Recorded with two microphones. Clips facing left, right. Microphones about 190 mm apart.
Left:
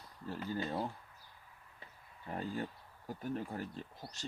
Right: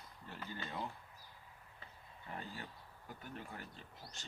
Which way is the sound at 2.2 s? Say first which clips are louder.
Left 9 dB; 40° left (ahead or behind).